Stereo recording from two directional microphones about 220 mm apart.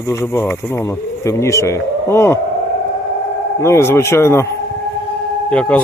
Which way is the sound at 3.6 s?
10° left (ahead or behind).